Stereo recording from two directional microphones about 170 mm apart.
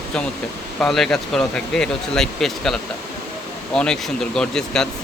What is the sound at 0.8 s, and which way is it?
Speech, centre (ahead or behind).